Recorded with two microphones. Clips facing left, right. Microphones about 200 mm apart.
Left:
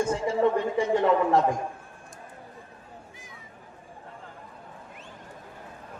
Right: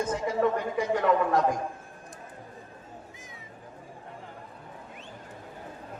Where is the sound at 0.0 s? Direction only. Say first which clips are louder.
Left 3 dB; 30° left (ahead or behind).